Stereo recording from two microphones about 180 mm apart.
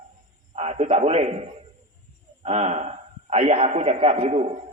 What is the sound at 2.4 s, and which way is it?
A man's voice, 35° right (ahead or behind).